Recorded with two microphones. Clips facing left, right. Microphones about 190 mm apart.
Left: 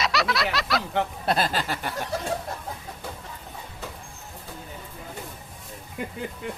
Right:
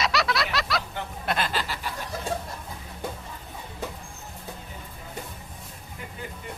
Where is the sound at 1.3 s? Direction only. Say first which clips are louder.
Even; 40° left (ahead or behind).